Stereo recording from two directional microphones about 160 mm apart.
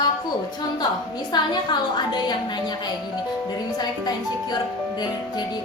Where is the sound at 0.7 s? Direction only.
25° left (ahead or behind).